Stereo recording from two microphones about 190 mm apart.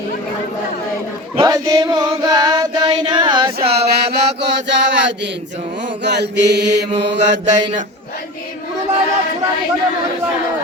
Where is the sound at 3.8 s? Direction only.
60° right (ahead or behind).